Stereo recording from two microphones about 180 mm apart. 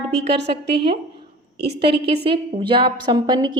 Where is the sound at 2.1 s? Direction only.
30° right (ahead or behind).